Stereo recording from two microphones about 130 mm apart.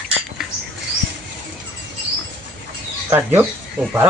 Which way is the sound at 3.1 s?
15° right (ahead or behind).